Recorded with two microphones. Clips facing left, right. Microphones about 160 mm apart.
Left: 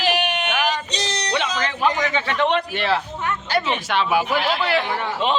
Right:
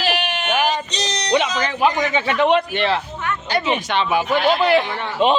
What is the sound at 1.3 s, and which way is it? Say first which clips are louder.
A man's voice: right 6 dB; 15° right (ahead or behind).